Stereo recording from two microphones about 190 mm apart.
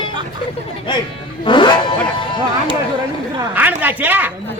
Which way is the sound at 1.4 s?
25° left (ahead or behind).